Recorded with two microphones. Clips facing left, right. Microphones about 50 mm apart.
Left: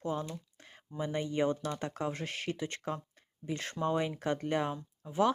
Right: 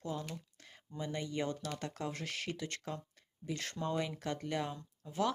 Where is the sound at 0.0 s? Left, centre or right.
Left.